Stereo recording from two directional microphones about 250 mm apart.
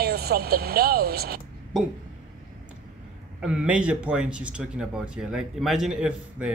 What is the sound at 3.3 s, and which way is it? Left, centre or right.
Speech, centre.